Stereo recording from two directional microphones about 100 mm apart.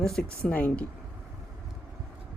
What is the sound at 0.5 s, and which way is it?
Speech, 15° left (ahead or behind).